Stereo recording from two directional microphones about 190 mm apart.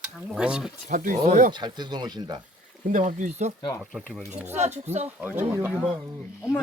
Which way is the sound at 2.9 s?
40° right (ahead or behind).